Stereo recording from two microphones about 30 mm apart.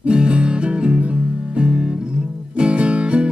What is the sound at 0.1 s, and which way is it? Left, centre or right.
Music, right.